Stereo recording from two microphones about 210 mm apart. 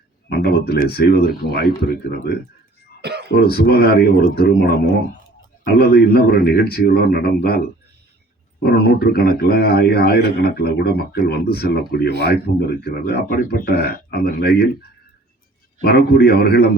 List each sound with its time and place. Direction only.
0.3 s speech: 50° left (ahead or behind)
3.0 s throat clearing: 50° right (ahead or behind)
3.3 s speech: 50° left (ahead or behind)
8.6 s speech: 50° left (ahead or behind)
15.8 s speech: 50° left (ahead or behind)